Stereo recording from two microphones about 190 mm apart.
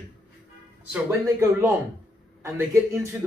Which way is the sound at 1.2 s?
15° right (ahead or behind).